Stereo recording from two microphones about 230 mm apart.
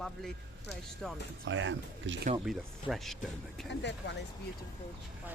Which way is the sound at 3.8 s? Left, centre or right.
Left.